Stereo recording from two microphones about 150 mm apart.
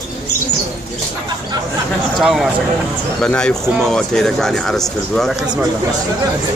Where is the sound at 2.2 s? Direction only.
Centre (ahead or behind).